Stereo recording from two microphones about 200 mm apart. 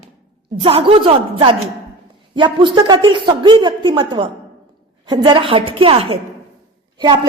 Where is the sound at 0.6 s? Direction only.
30° right (ahead or behind).